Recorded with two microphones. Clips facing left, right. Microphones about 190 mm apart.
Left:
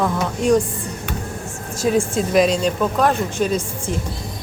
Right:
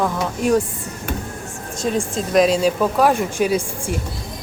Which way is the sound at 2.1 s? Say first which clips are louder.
Even; centre (ahead or behind).